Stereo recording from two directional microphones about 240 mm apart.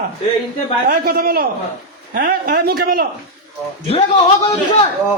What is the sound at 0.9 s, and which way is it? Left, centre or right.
A man's voice, right.